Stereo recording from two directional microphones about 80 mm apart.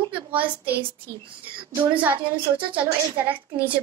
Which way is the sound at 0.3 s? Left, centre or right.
Right.